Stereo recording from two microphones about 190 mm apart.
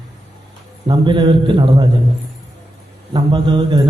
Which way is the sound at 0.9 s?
25° right (ahead or behind).